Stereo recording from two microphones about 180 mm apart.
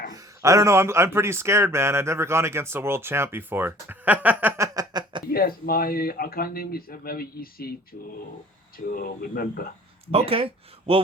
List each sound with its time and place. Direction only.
0.1 s speech: 20° right (ahead or behind)
5.3 s speech: 55° left (ahead or behind)
10.1 s speech: 30° right (ahead or behind)